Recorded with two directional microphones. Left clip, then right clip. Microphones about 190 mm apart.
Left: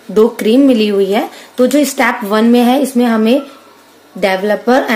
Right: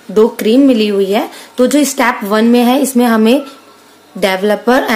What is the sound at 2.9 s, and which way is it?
Speech, 15° right (ahead or behind).